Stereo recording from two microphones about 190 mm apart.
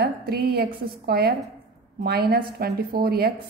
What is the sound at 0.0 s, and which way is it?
A woman's voice, 55° right (ahead or behind).